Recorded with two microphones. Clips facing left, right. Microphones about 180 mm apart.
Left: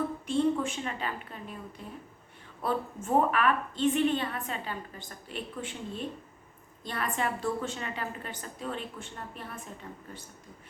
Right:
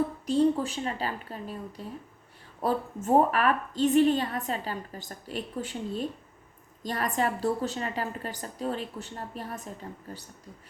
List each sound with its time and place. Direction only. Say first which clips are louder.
0.3 s a woman's voice: right 3 dB; 35° right (ahead or behind)